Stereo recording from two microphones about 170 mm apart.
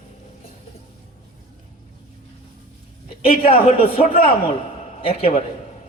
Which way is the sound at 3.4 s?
35° left (ahead or behind).